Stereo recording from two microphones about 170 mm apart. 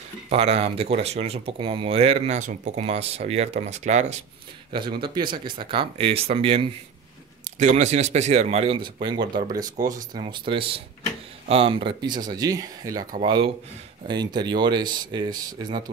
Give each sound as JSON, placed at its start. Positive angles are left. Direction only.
{"t": 0.3, "sound": "speech", "side_deg": -35}
{"t": 5.0, "sound": "speech", "side_deg": -30}